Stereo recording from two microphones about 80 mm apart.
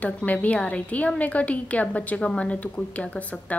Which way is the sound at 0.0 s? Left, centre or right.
Centre.